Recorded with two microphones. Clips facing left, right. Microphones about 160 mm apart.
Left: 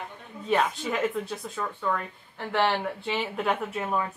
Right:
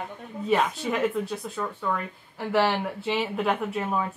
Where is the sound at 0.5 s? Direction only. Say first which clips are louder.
Right 1 dB; centre (ahead or behind).